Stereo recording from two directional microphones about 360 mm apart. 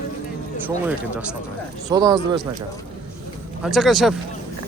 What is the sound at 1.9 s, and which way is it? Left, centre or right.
Speech, centre.